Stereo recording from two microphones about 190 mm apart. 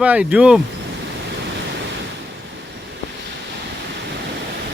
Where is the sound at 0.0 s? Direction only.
5° right (ahead or behind).